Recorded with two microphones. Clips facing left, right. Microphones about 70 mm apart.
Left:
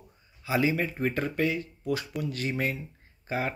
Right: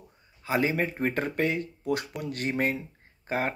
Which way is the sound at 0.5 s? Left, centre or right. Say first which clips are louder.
Even; right.